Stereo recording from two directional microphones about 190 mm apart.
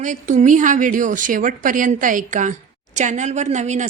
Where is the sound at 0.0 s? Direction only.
40° right (ahead or behind).